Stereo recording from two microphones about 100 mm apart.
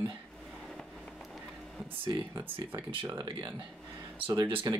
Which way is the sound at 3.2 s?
50° right (ahead or behind).